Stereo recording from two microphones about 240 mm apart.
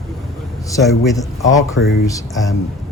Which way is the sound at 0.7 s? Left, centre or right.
Centre.